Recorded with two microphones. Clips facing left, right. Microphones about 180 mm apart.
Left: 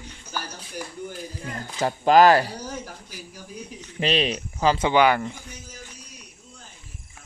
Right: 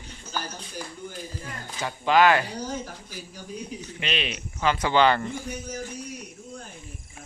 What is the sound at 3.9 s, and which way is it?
Speech, 35° left (ahead or behind).